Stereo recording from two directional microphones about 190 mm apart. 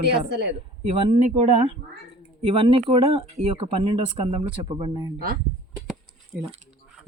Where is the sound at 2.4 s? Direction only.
30° right (ahead or behind).